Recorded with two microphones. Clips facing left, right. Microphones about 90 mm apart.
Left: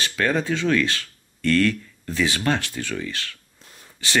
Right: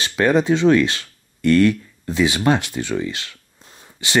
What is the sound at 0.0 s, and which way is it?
Speech, 20° right (ahead or behind).